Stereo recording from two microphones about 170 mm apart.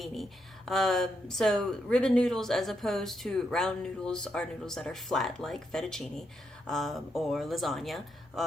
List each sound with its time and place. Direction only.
0.0 s speech: centre (ahead or behind)